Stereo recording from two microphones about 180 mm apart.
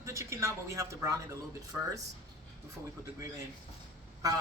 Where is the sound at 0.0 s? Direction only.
15° right (ahead or behind).